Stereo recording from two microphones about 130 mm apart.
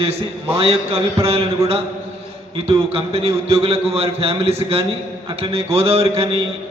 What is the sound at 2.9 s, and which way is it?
A man's voice, 50° right (ahead or behind).